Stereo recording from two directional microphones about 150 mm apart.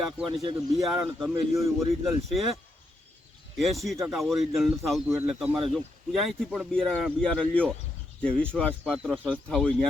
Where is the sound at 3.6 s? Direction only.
Centre (ahead or behind).